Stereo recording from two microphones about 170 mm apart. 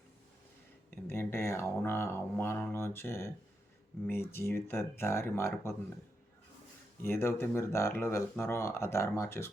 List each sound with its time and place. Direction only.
0.9 s a sound: 15° left (ahead or behind)
4.0 s speech: 15° left (ahead or behind)
7.0 s speech: 15° left (ahead or behind)